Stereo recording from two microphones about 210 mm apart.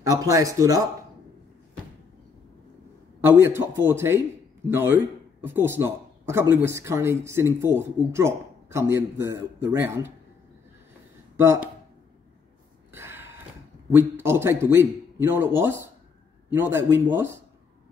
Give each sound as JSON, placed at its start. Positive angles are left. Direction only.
{"t": 0.0, "sound": "speech", "side_deg": -15}
{"t": 3.2, "sound": "a man's voice", "side_deg": -10}
{"t": 11.3, "sound": "speech", "side_deg": -10}
{"t": 12.9, "sound": "a sound", "side_deg": -10}
{"t": 13.9, "sound": "speech", "side_deg": -10}